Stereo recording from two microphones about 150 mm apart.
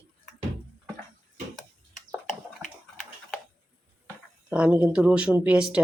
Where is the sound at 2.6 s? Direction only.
20° right (ahead or behind).